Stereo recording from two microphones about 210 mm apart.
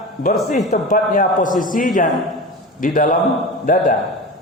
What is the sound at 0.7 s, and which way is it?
A man's voice, 35° left (ahead or behind).